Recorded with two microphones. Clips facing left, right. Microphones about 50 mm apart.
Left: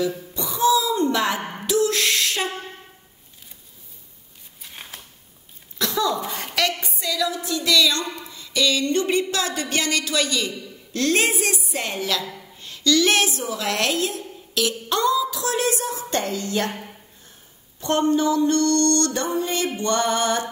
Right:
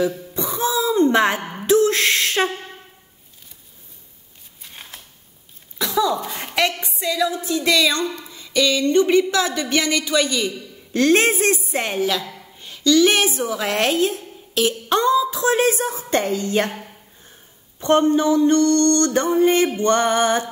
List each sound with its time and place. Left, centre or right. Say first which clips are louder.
0.3 s throat clearing: left 3 dB; right
1.7 s a sound: right 5 dB; right
4.6 s scissors: even; centre
5.9 s speech: right 3 dB; centre
6.4 s a woman's voice: right 4 dB; centre
11.0 s a woman's voice: right 5 dB; right
12.5 s a sound: right 4 dB; centre
13.6 s speech: right 3 dB; right
17.7 s speech: right 4 dB; right